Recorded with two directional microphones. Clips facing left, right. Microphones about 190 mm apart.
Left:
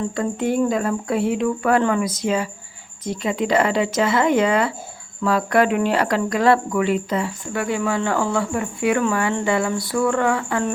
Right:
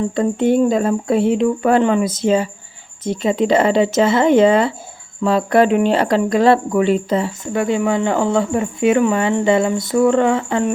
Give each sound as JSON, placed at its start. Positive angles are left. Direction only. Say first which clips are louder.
{"t": 0.2, "sound": "speech", "louder": "right 6 dB", "side_deg": -25}